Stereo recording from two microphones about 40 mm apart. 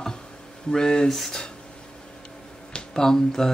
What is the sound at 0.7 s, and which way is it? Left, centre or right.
Speech, centre.